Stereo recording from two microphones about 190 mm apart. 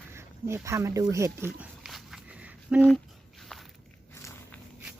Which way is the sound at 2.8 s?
5° left (ahead or behind).